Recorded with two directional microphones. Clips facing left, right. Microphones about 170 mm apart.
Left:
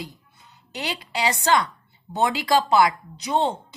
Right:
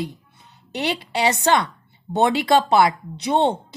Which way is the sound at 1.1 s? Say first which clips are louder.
Right 2 dB; 25° right (ahead or behind).